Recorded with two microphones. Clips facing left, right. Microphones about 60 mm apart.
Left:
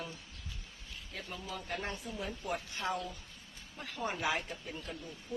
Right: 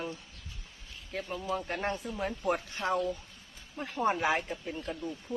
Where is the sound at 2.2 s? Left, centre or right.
Right.